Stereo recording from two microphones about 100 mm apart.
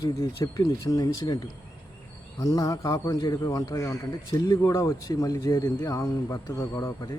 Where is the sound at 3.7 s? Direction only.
30° left (ahead or behind).